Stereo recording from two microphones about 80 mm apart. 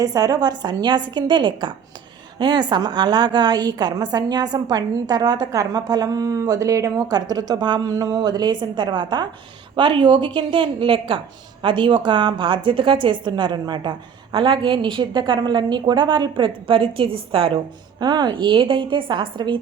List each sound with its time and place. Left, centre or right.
0.0 s a woman's voice: right
7.1 s a woman's voice: right
9.7 s a woman's voice: right
14.3 s a woman's voice: right
18.0 s a woman's voice: right